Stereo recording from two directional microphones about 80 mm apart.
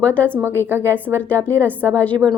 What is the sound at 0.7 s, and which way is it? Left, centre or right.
Speech, right.